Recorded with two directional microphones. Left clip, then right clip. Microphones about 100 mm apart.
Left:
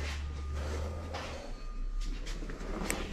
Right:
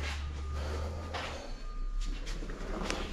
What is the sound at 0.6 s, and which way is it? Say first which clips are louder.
Vehicle: even; 10° left (ahead or behind).